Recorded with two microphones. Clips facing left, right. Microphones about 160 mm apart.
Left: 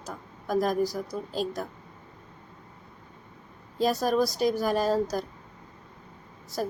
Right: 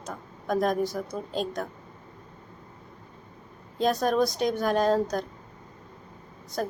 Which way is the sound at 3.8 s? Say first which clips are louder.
Right 1 dB; centre (ahead or behind).